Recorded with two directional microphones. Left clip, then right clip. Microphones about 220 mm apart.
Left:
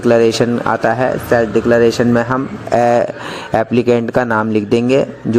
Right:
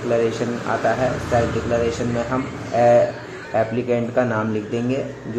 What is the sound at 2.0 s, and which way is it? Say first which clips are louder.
Speech: left 11 dB; 50° left (ahead or behind).